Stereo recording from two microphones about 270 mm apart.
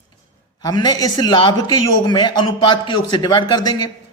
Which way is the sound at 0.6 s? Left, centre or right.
Centre.